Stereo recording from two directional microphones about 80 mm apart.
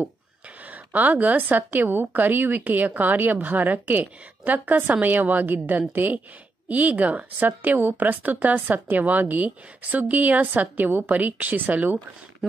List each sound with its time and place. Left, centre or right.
0.7 s a woman's voice: right